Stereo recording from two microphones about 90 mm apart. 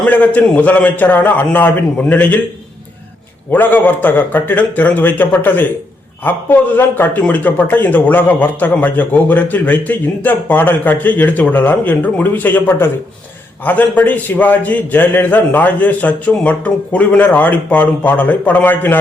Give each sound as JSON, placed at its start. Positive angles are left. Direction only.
{"t": 0.0, "sound": "a man's voice", "side_deg": 15}
{"t": 3.5, "sound": "a man's voice", "side_deg": 20}